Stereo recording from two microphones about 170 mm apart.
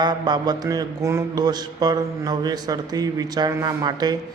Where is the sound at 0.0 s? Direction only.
25° right (ahead or behind).